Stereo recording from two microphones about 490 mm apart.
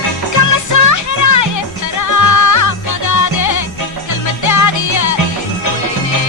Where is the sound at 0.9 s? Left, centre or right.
Left.